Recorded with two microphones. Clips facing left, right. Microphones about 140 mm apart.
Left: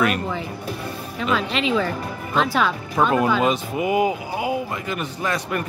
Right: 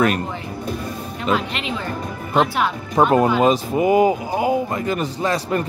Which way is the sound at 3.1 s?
35° right (ahead or behind).